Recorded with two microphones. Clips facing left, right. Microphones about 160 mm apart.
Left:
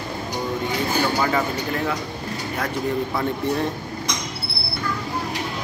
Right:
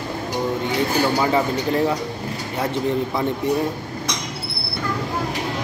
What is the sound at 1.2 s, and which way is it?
Speech, 25° right (ahead or behind).